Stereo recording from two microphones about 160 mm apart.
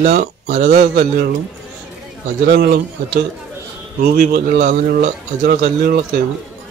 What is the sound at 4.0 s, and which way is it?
Speech, 70° right (ahead or behind).